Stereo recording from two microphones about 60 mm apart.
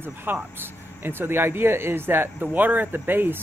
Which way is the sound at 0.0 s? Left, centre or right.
Right.